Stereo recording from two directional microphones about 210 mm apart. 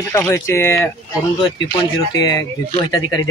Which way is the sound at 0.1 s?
15° left (ahead or behind).